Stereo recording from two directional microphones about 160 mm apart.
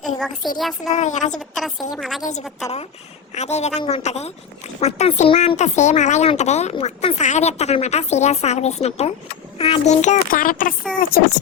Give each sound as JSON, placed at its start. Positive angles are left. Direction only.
{"t": 0.4, "sound": "a woman's voice", "side_deg": 0}
{"t": 0.9, "sound": "speech", "side_deg": 50}
{"t": 1.5, "sound": "a woman's voice", "side_deg": 0}
{"t": 2.2, "sound": "speech", "side_deg": 45}